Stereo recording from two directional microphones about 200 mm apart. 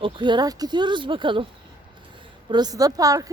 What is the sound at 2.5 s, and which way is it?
Speech, 20° right (ahead or behind).